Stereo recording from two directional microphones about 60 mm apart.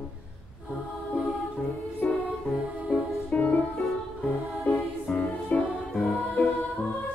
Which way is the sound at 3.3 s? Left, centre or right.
Left.